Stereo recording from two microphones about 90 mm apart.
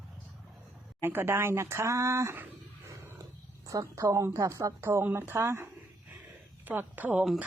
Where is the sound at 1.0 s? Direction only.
25° right (ahead or behind).